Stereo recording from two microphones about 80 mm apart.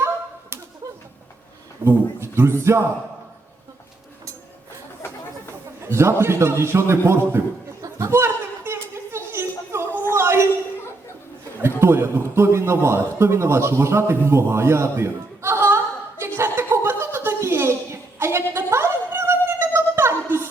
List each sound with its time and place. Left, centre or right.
1.8 s a man's voice: right
5.8 s a man's voice: right
7.8 s chatter: right
8.1 s a sound: right
11.8 s a man's voice: right
16.2 s chuckle: right